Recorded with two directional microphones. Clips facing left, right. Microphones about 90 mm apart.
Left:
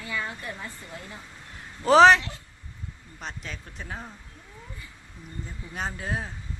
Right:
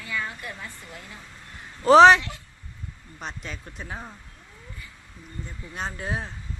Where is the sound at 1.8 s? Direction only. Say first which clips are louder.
Right 3 dB; centre (ahead or behind).